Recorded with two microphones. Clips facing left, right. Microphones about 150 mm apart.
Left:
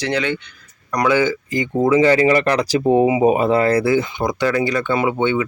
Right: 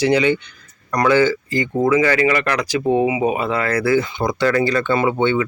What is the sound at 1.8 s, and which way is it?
Speech, 30° left (ahead or behind).